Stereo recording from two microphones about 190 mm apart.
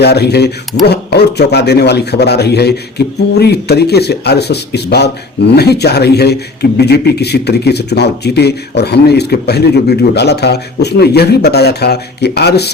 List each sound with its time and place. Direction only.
0.0 s speech: 60° left (ahead or behind)